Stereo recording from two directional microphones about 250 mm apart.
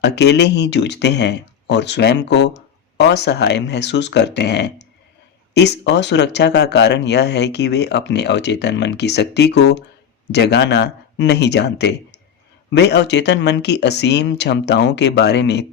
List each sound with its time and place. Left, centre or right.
0.0 s speech: left